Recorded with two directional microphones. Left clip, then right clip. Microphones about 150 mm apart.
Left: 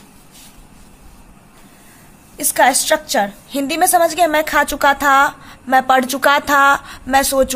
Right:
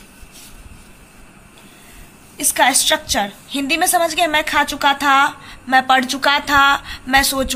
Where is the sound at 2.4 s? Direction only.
65° left (ahead or behind).